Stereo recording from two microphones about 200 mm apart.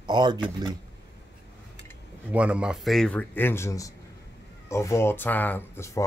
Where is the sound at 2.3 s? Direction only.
5° right (ahead or behind).